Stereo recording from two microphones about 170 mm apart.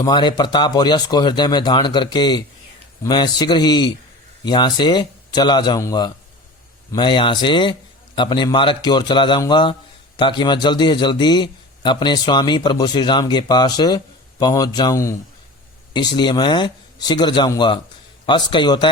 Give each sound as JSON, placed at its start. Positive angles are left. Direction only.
{"t": 0.0, "sound": "a man's voice", "side_deg": 25}